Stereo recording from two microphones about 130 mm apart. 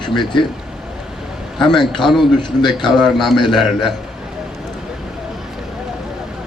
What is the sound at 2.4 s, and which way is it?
Speech, 35° left (ahead or behind).